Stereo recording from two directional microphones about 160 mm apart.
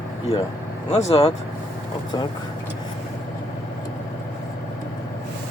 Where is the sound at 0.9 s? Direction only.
40° left (ahead or behind).